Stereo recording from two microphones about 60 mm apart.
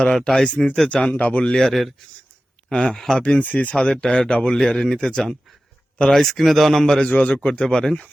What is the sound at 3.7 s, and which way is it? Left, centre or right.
Speech, centre.